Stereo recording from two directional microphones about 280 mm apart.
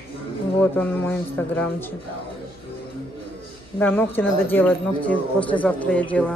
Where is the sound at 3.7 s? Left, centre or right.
Centre.